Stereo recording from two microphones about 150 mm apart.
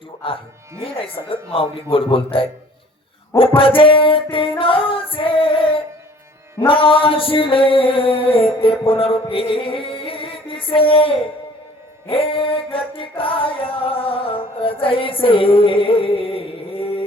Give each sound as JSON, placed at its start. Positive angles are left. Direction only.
{"t": 0.8, "sound": "singing", "side_deg": 40}